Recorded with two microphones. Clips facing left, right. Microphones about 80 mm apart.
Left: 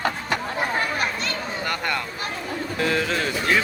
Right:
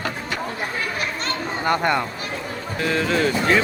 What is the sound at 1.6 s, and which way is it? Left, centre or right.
Speech, right.